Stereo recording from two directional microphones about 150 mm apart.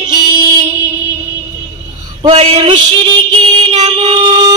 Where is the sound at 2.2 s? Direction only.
40° right (ahead or behind).